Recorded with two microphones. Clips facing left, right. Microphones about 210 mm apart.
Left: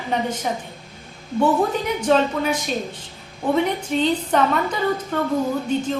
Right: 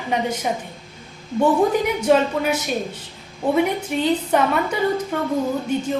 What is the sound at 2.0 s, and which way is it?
A woman's voice, 10° right (ahead or behind).